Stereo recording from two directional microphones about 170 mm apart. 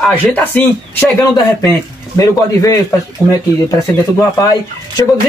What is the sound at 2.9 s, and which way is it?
Speech, 20° left (ahead or behind).